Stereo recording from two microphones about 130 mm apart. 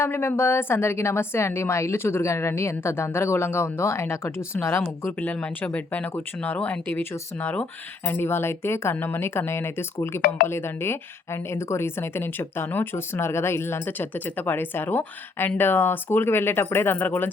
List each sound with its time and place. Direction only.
0.0 s a woman's voice: 20° left (ahead or behind)